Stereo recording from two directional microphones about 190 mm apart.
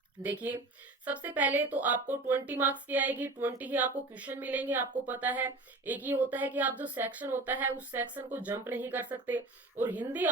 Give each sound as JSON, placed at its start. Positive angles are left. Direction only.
{"t": 0.2, "sound": "speech", "side_deg": -10}